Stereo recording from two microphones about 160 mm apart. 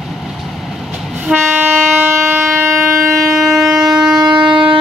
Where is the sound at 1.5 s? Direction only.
10° right (ahead or behind).